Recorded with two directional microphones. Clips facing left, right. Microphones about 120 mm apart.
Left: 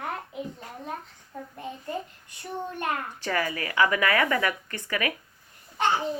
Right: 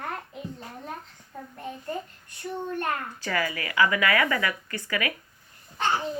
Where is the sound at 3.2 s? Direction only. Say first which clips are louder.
Left 1 dB; 25° left (ahead or behind).